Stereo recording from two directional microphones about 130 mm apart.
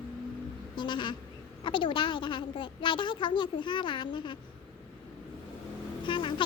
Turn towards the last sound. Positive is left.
turn(degrees=40)  # may be behind; listen again after turning